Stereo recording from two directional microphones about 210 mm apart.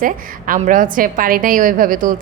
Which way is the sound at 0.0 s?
40° right (ahead or behind).